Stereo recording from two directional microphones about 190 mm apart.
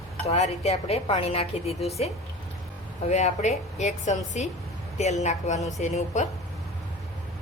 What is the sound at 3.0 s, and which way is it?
A woman's voice, 35° left (ahead or behind).